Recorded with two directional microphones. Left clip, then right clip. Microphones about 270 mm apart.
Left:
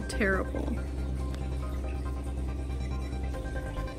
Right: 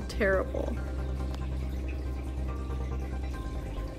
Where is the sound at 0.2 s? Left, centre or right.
Left.